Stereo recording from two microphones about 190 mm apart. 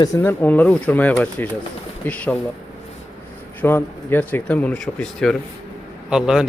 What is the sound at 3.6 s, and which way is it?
A man's voice, 10° left (ahead or behind).